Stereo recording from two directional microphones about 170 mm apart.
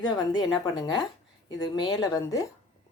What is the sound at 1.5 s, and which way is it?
Speech, 25° left (ahead or behind).